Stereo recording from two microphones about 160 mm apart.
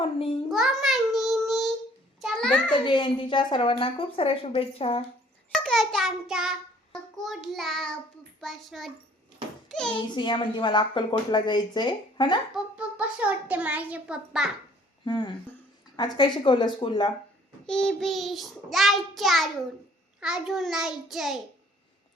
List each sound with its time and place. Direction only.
0.0 s a woman's voice: 35° left (ahead or behind)
0.5 s child singing: centre (ahead or behind)
2.2 s a sound: 5° left (ahead or behind)
2.7 s a woman's voice: 30° left (ahead or behind)
5.5 s child singing: centre (ahead or behind)
10.1 s a woman's voice: 30° left (ahead or behind)
12.5 s a child's voice: 10° right (ahead or behind)
15.0 s a woman's voice: 30° left (ahead or behind)
17.7 s child singing: 5° left (ahead or behind)